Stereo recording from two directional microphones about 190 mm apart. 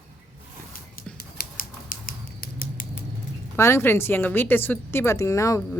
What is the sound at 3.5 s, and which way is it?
A woman's voice, 15° left (ahead or behind).